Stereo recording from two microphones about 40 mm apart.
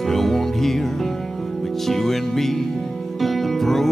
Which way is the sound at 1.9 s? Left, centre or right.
Centre.